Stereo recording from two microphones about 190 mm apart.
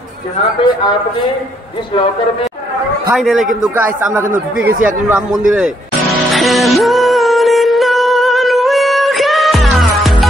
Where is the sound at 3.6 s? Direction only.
10° right (ahead or behind).